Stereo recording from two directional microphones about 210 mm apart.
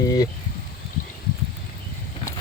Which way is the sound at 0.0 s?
15° left (ahead or behind).